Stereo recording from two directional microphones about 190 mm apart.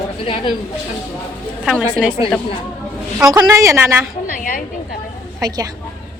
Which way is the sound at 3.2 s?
15° right (ahead or behind).